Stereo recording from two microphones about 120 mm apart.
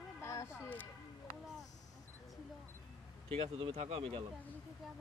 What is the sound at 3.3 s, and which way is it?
Speech, 50° right (ahead or behind).